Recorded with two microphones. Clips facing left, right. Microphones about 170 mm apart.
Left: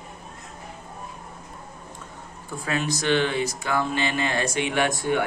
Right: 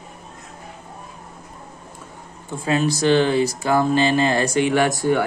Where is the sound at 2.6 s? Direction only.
30° right (ahead or behind).